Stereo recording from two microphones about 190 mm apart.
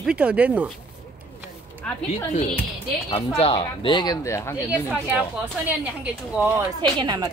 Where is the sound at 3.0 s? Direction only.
30° left (ahead or behind).